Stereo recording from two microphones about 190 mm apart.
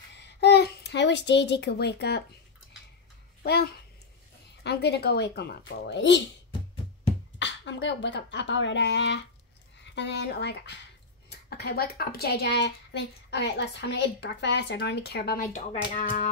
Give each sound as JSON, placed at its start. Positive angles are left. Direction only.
{"t": 0.1, "sound": "a sound", "side_deg": 60}
{"t": 4.6, "sound": "speech", "side_deg": 60}
{"t": 7.3, "sound": "speech", "side_deg": 75}